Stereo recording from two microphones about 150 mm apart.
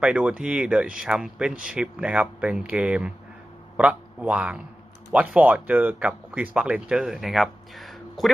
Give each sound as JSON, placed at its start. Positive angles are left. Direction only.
{"t": 0.0, "sound": "speech", "side_deg": -5}